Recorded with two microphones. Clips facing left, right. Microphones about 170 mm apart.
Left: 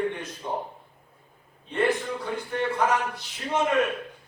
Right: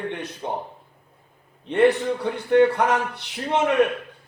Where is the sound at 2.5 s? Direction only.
70° right (ahead or behind).